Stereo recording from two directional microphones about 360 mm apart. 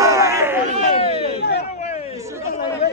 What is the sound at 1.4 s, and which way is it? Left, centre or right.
Speech, left.